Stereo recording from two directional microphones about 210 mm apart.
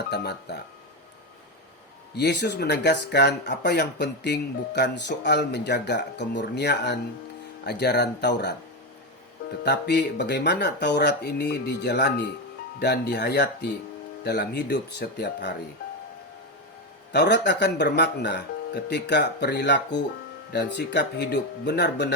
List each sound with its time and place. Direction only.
0.1 s speech: 55° left (ahead or behind)
2.1 s speech: 55° left (ahead or behind)
9.6 s speech: 55° left (ahead or behind)
17.1 s speech: 55° left (ahead or behind)